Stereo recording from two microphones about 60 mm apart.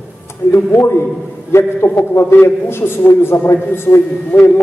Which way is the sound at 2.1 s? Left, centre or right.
Left.